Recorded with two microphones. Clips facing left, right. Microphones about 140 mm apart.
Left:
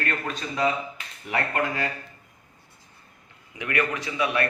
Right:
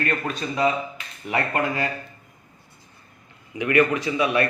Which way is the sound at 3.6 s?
15° right (ahead or behind).